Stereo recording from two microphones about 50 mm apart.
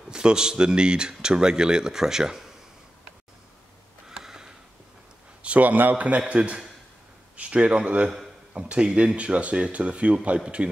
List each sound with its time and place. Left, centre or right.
0.1 s speech: centre
4.1 s a sound: centre
5.4 s speech: right